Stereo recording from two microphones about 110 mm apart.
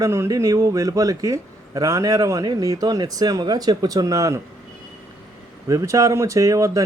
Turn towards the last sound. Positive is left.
turn(degrees=-30)  # may be behind; listen again after turning